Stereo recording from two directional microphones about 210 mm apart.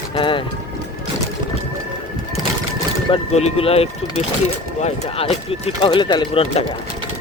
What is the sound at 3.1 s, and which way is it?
Speech, 30° left (ahead or behind).